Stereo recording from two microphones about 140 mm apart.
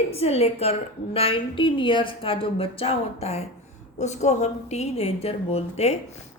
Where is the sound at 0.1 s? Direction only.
45° left (ahead or behind).